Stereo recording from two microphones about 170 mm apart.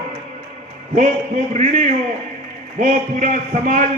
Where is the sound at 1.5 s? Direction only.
45° right (ahead or behind).